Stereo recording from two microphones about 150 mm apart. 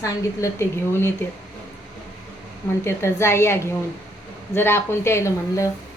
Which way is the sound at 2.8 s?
20° left (ahead or behind).